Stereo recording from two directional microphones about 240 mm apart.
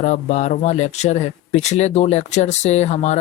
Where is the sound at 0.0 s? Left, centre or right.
Left.